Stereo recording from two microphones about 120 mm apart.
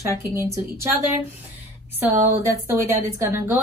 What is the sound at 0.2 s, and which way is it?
Speech, 20° right (ahead or behind).